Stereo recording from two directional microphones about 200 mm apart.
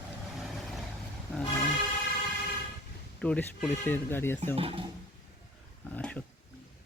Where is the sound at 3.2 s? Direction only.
5° left (ahead or behind).